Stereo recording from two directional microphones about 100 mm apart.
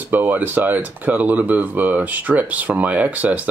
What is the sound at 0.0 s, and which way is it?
Speech, 20° right (ahead or behind).